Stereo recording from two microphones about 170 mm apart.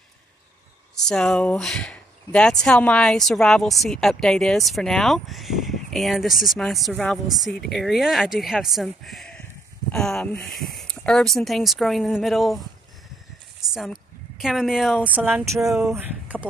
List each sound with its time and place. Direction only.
0.9 s speech: 5° left (ahead or behind)
13.6 s a sound: centre (ahead or behind)
14.4 s speech: centre (ahead or behind)